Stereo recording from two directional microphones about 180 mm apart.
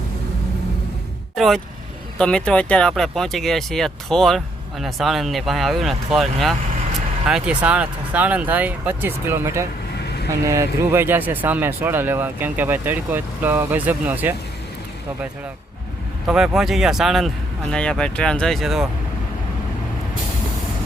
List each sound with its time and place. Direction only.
1.4 s speech: centre (ahead or behind)
16.2 s speech: 5° right (ahead or behind)